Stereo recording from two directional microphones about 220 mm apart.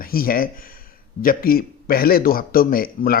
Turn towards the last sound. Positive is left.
turn(degrees=40)  # may be behind; listen again after turning